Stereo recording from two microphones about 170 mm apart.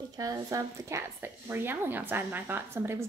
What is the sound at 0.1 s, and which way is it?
A woman's voice, 20° right (ahead or behind).